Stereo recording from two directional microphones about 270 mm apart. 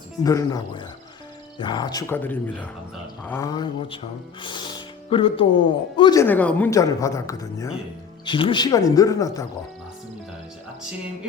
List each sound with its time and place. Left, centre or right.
0.2 s speech: centre